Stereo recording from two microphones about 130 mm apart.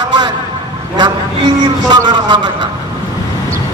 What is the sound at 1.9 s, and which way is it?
Speech, 35° right (ahead or behind).